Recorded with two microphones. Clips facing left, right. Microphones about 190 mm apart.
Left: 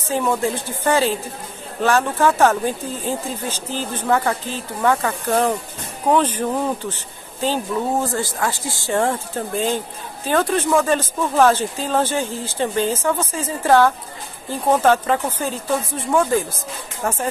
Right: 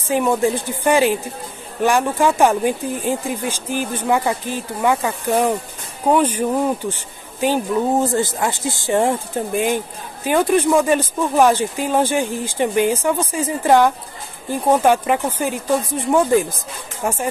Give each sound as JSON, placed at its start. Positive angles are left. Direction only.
{"t": 0.1, "sound": "speech", "side_deg": -15}